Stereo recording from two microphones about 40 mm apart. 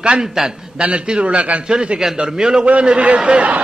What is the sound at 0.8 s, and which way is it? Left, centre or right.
Speech, right.